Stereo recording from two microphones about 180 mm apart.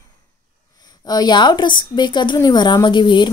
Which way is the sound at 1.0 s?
20° left (ahead or behind).